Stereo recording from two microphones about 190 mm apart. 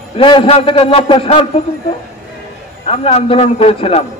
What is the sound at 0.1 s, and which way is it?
A man's voice, 30° left (ahead or behind).